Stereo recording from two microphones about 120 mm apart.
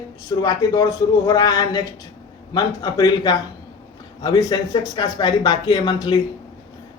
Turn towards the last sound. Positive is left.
turn(degrees=35)  # may be behind; listen again after turning